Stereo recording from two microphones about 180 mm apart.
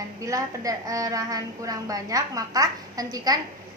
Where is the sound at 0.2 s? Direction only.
20° right (ahead or behind).